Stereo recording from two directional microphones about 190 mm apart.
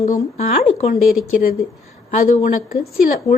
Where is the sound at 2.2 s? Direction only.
45° left (ahead or behind).